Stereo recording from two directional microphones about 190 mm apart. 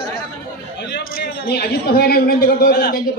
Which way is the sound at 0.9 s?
60° left (ahead or behind).